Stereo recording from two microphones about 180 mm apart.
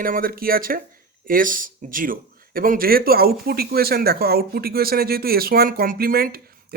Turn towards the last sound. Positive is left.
turn(degrees=-55)  # may be behind; listen again after turning